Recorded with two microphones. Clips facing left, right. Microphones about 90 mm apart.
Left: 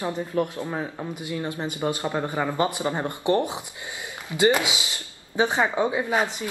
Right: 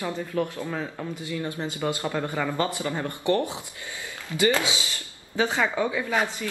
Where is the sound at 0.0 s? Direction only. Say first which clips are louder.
Left 2 dB; 20° left (ahead or behind).